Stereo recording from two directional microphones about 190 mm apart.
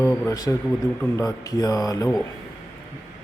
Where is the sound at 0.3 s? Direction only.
20° left (ahead or behind).